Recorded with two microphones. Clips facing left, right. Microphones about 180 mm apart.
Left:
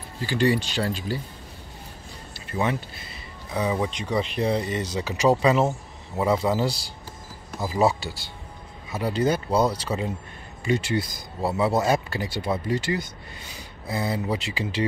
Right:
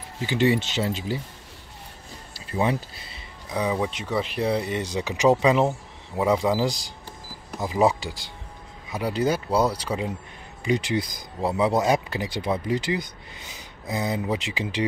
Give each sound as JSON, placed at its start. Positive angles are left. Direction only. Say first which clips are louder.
{"t": 0.2, "sound": "speech", "louder": "right 1 dB", "side_deg": -20}
{"t": 3.7, "sound": "speech", "louder": "even", "side_deg": -5}